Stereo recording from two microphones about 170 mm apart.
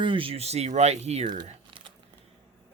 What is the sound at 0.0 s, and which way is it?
Speech, 30° right (ahead or behind).